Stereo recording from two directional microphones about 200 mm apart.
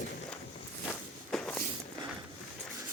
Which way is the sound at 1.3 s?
5° left (ahead or behind).